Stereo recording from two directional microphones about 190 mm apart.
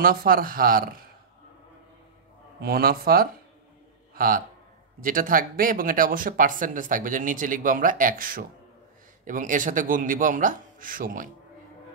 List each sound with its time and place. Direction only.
0.0 s speech: 50° right (ahead or behind)
2.6 s speech: 50° right (ahead or behind)
4.1 s a sound: 45° right (ahead or behind)
5.0 s speech: 45° right (ahead or behind)